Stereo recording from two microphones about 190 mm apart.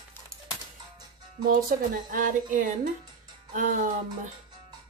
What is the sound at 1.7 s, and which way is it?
Speech, 45° right (ahead or behind).